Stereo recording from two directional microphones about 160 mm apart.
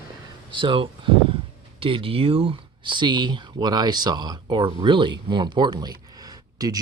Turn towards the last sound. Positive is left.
turn(degrees=-25)  # may be behind; listen again after turning